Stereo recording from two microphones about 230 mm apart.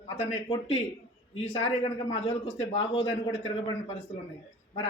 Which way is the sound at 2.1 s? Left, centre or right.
Left.